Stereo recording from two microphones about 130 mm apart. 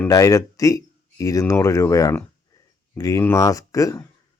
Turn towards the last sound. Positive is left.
turn(degrees=25)  # may be behind; listen again after turning